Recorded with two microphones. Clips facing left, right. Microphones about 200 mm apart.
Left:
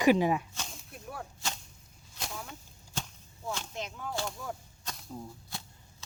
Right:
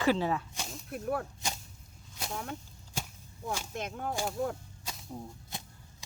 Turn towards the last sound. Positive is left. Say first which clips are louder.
# right 1 dB
turn(degrees=-20)  # may be behind; listen again after turning